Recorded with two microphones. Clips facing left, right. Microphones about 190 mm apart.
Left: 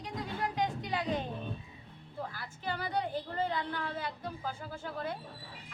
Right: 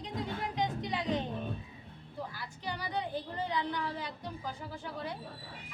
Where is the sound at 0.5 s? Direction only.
20° right (ahead or behind).